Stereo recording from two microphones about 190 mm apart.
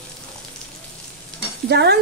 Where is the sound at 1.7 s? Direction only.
60° right (ahead or behind).